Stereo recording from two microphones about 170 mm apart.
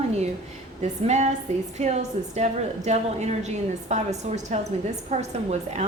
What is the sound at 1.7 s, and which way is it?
A woman's voice, 40° right (ahead or behind).